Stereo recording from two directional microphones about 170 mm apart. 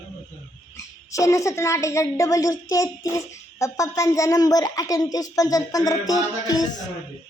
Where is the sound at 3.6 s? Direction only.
20° left (ahead or behind).